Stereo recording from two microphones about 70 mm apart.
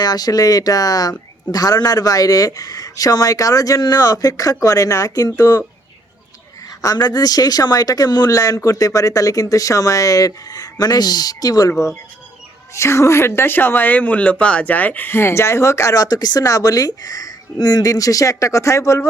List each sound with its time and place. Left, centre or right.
0.0 s speech: left
6.8 s speech: left
12.7 s speech: left